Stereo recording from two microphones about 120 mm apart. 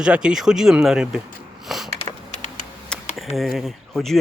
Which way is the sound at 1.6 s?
5° right (ahead or behind).